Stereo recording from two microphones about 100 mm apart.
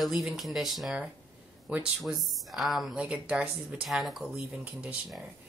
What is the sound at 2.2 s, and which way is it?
Speech, centre (ahead or behind).